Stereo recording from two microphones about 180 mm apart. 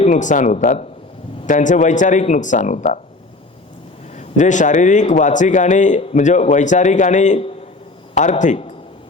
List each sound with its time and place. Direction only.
0.0 s a man's voice: 45° left (ahead or behind)
4.1 s a man's voice: 40° left (ahead or behind)